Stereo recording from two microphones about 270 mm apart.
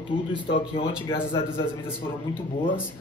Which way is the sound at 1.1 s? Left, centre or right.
Centre.